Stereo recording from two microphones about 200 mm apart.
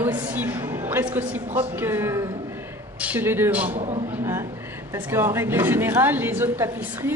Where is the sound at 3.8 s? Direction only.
35° right (ahead or behind).